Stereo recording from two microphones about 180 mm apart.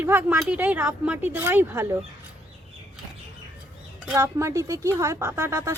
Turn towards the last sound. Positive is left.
turn(degrees=-15)  # may be behind; listen again after turning